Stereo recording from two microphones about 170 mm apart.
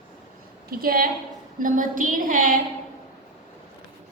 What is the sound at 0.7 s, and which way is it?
Speech, 60° right (ahead or behind).